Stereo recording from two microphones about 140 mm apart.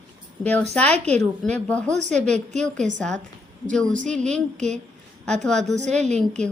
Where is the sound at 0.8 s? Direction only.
10° left (ahead or behind).